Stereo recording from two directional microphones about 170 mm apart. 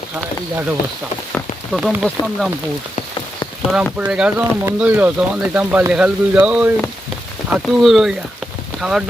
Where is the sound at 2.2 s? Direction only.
25° left (ahead or behind).